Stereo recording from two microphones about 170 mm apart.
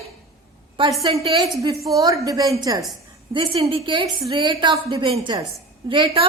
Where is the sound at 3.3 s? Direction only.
35° right (ahead or behind).